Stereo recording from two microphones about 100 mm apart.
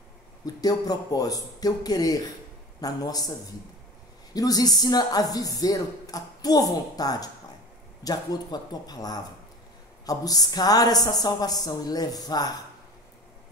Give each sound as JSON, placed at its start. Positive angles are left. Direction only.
{"t": 0.6, "sound": "speech", "side_deg": 40}